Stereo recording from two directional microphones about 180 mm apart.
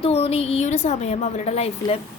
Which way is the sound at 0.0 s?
35° left (ahead or behind).